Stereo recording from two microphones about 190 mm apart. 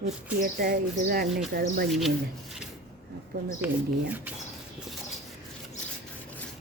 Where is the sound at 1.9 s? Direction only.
Centre (ahead or behind).